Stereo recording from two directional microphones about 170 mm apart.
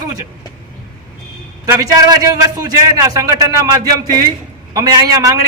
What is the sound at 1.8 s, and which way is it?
A man's voice, 20° right (ahead or behind).